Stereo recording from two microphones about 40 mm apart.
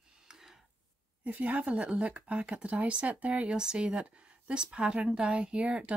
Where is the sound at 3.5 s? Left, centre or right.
Right.